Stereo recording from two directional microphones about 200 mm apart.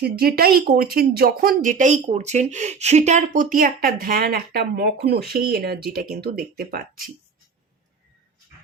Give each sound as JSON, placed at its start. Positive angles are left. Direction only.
{"t": 0.0, "sound": "speech", "side_deg": -50}